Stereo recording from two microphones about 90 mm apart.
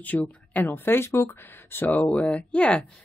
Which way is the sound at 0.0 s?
20° left (ahead or behind).